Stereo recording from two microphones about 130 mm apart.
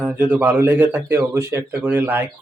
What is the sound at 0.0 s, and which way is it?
Speech, 10° right (ahead or behind).